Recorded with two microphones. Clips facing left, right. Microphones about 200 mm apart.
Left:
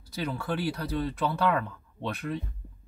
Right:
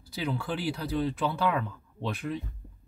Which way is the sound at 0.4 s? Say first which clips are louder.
Left 1 dB; 60° left (ahead or behind).